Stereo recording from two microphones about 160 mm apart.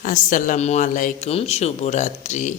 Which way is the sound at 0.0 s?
55° left (ahead or behind).